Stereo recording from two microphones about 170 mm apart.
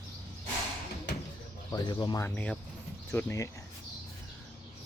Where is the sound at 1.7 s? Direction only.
25° left (ahead or behind).